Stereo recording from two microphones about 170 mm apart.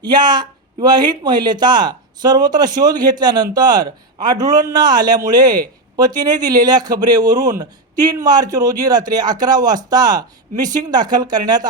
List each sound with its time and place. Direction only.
0.0 s speech: 25° right (ahead or behind)